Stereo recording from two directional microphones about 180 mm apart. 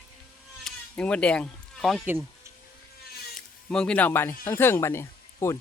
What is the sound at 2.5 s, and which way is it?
Cat, 15° right (ahead or behind).